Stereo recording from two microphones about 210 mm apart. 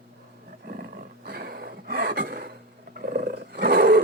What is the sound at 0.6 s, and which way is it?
Roar, 45° right (ahead or behind).